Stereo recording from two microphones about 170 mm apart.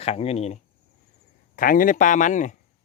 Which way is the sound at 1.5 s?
55° left (ahead or behind).